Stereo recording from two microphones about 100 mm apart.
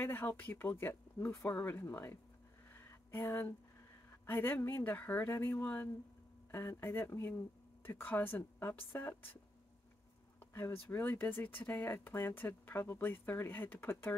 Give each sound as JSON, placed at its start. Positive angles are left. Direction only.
{"t": 0.0, "sound": "speech", "side_deg": 20}
{"t": 10.5, "sound": "speech", "side_deg": 20}